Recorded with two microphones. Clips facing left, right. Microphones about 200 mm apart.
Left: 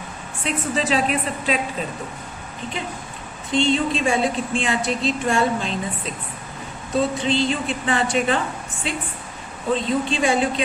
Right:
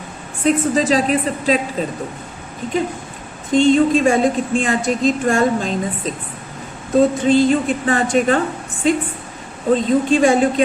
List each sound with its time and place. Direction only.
0.4 s a woman's voice: 40° right (ahead or behind)
3.5 s a woman's voice: 45° right (ahead or behind)